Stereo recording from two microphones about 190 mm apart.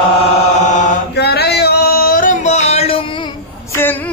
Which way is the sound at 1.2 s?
60° left (ahead or behind).